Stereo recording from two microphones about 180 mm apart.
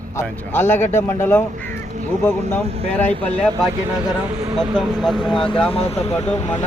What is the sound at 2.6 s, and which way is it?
Speech, 35° right (ahead or behind).